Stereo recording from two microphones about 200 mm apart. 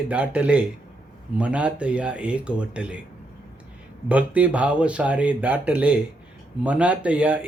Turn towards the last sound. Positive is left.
turn(degrees=-5)  # may be behind; listen again after turning